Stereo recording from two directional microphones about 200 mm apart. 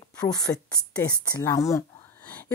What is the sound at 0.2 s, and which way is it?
Speech, 15° left (ahead or behind).